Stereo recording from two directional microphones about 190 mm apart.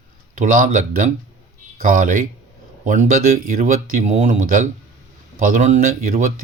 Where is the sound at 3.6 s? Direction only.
40° right (ahead or behind).